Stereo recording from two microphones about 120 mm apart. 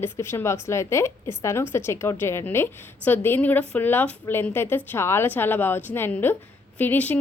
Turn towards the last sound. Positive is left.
turn(degrees=15)  # may be behind; listen again after turning